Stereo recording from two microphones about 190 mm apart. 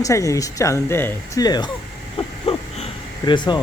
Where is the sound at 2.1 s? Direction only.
35° left (ahead or behind).